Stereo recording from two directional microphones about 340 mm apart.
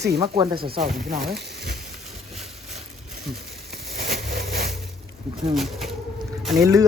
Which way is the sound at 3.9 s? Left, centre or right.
Right.